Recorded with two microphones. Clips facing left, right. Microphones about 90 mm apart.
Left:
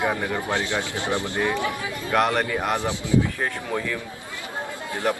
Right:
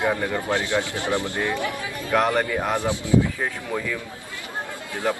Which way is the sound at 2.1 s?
5° left (ahead or behind).